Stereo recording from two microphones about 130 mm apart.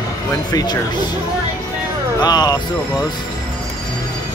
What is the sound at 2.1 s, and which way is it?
Speech, 30° left (ahead or behind).